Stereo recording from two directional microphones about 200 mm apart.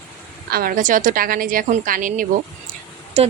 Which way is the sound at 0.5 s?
45° right (ahead or behind).